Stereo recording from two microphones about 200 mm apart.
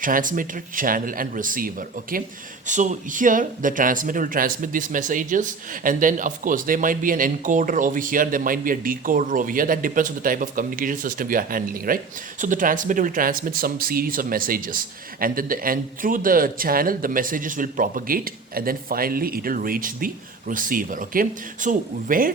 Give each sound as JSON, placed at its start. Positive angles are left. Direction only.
{"t": 0.0, "sound": "speech", "side_deg": -40}